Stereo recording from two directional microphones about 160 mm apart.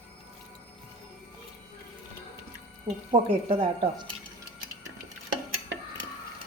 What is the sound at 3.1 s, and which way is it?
Speech, 30° right (ahead or behind).